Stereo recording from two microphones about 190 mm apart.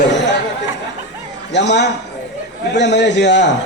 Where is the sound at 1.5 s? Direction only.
65° left (ahead or behind).